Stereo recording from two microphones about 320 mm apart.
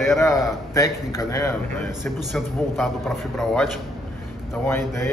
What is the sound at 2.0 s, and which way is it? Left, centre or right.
A man's voice, centre.